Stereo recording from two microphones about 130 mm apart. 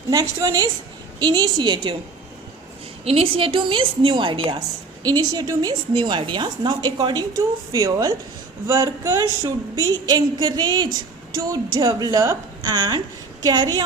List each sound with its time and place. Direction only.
0.1 s a woman's voice: 25° right (ahead or behind)
3.0 s a woman's voice: 50° right (ahead or behind); by 13.8 s 30° right (ahead or behind)